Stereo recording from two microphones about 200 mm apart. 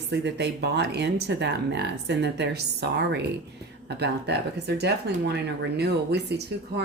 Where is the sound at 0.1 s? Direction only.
55° right (ahead or behind).